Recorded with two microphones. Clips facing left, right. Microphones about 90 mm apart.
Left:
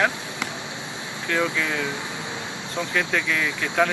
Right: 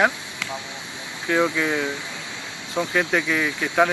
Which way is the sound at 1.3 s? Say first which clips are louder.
Right 4 dB; 10° right (ahead or behind).